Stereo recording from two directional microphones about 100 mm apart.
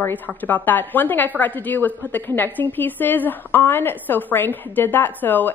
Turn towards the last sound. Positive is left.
turn(degrees=20)  # may be behind; listen again after turning